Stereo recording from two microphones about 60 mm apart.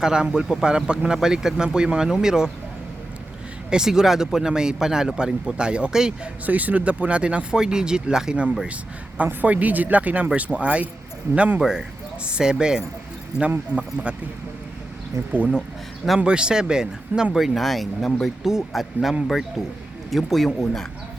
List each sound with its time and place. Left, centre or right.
0.0 s speech: centre
3.7 s speech: centre
6.4 s speech: right
8.6 s speech: right
11.6 s speech: centre
15.3 s speech: right
17.3 s speech: centre